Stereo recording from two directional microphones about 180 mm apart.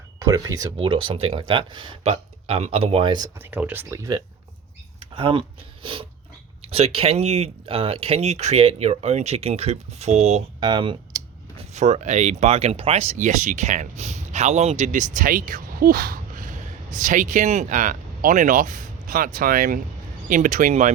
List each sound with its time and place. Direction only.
0.2 s speech: 20° right (ahead or behind)
3.3 s speech: 10° right (ahead or behind)
5.1 s speech: 30° right (ahead or behind)
11.7 s speech: 40° right (ahead or behind)